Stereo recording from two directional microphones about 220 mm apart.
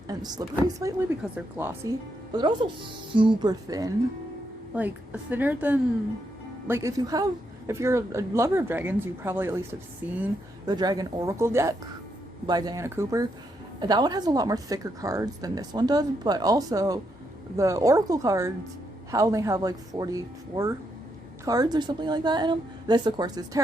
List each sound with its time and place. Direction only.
0.1 s a sound: 20° right (ahead or behind)
0.8 s speech: 15° right (ahead or behind)
2.3 s a woman's voice: 20° right (ahead or behind)